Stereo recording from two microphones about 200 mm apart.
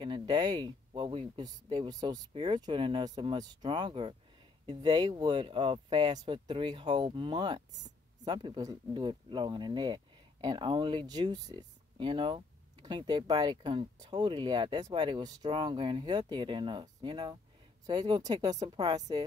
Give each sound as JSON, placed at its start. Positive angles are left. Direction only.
{"t": 0.0, "sound": "speech", "side_deg": -20}